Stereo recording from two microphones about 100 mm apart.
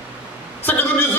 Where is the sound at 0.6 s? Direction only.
20° left (ahead or behind).